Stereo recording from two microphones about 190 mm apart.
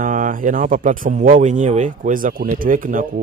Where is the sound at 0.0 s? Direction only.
45° right (ahead or behind).